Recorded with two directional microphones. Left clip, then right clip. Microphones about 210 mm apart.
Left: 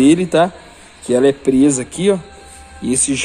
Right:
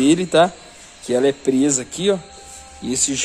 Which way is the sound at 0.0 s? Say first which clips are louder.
Left 2 dB; 5° left (ahead or behind).